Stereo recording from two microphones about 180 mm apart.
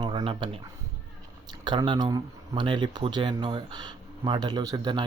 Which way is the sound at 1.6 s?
25° right (ahead or behind).